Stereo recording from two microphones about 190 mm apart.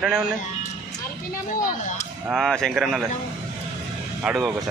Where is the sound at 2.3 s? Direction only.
Centre (ahead or behind).